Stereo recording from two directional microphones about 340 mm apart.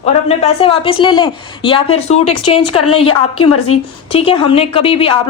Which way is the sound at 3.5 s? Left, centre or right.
Left.